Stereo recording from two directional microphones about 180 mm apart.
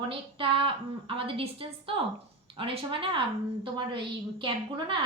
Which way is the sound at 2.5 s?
30° right (ahead or behind).